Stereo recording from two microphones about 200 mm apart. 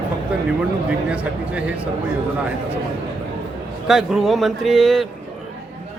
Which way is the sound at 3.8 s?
Centre (ahead or behind).